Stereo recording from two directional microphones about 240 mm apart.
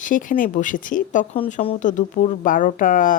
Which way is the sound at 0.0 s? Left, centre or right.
Left.